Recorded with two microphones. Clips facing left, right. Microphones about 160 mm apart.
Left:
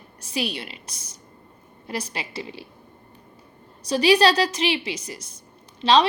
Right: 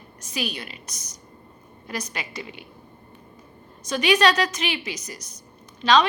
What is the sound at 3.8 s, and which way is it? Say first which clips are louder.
A woman's voice: left 2 dB; 35° left (ahead or behind).